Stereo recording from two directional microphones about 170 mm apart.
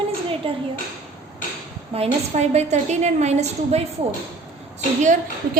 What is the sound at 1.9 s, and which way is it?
A woman's voice, 35° right (ahead or behind).